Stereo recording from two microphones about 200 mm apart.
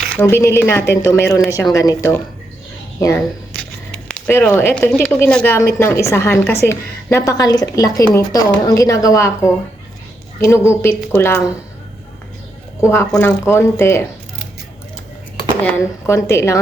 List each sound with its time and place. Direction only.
0.2 s a woman's voice: 10° left (ahead or behind)
10.5 s a woman's voice: 15° left (ahead or behind)
13.1 s a woman's voice: 10° left (ahead or behind)
15.6 s a woman's voice: 15° left (ahead or behind)